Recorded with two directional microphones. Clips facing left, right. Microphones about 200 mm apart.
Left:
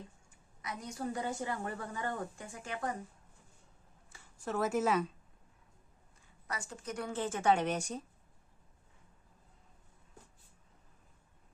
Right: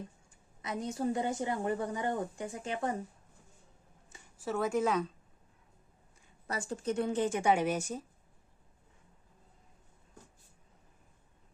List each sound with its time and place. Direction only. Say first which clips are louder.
0.6 s a woman's voice: right 6 dB; 25° right (ahead or behind)
4.4 s a woman's voice: right 2 dB; centre (ahead or behind)
6.5 s a woman's voice: right 7 dB; 30° right (ahead or behind); by 8.0 s 5° right (ahead or behind)